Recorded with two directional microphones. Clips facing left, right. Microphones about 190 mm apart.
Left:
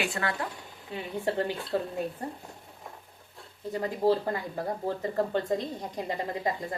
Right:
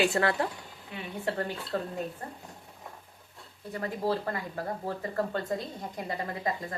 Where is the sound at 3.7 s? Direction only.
20° left (ahead or behind).